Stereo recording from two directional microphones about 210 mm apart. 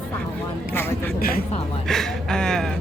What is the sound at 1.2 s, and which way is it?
Speech, 45° left (ahead or behind).